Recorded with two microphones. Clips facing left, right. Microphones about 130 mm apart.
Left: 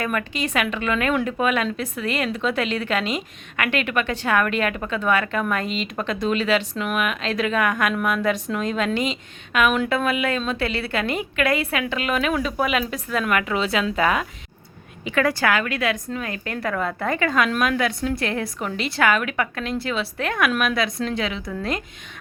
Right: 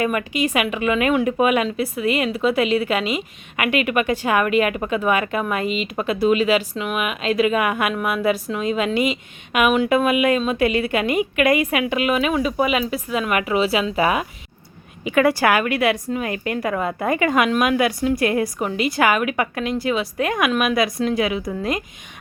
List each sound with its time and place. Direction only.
0.0 s a woman's voice: 10° right (ahead or behind)